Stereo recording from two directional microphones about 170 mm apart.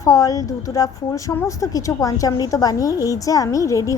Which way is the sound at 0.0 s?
20° left (ahead or behind).